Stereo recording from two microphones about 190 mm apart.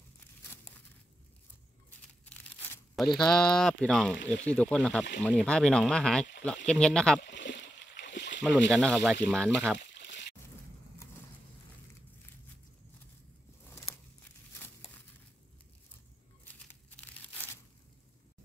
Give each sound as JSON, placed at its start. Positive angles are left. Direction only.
{"t": 1.9, "sound": "crumpling", "side_deg": 5}
{"t": 3.3, "sound": "speech", "side_deg": 5}
{"t": 7.2, "sound": "splash", "side_deg": 65}
{"t": 8.5, "sound": "speech", "side_deg": 0}
{"t": 9.9, "sound": "a sound", "side_deg": 65}
{"t": 13.7, "sound": "a sound", "side_deg": 10}